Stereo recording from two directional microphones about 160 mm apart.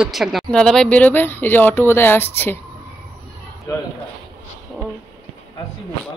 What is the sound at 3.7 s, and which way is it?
Speech, 20° left (ahead or behind).